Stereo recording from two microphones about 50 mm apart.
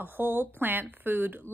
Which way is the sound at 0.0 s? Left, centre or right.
Right.